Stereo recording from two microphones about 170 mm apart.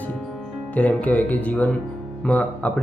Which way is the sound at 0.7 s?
10° left (ahead or behind).